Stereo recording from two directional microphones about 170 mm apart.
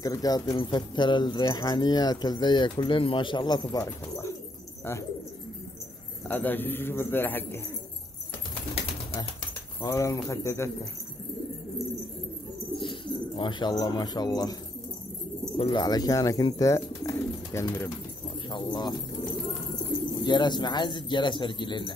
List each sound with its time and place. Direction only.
0.0 s speech: 20° left (ahead or behind)
6.2 s speech: 10° left (ahead or behind)
9.8 s speech: 15° left (ahead or behind)
12.7 s speech: 30° left (ahead or behind)
20.2 s speech: 25° left (ahead or behind)